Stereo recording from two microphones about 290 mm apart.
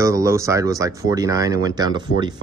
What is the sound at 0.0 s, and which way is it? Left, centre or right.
Speech, centre.